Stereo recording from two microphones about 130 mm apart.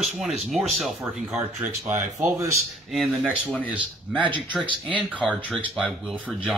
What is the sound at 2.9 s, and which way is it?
Speech, centre (ahead or behind).